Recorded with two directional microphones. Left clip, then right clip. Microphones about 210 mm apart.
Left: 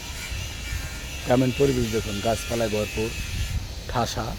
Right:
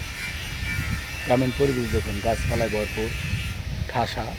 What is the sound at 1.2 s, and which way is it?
Speech, 15° left (ahead or behind).